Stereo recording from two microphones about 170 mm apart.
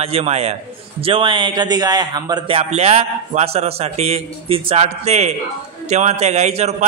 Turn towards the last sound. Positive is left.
turn(degrees=-40)  # may be behind; listen again after turning